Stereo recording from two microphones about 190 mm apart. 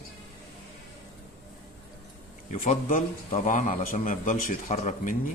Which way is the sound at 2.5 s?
45° left (ahead or behind).